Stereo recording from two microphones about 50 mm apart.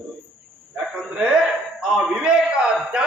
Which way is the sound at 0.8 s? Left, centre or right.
Centre.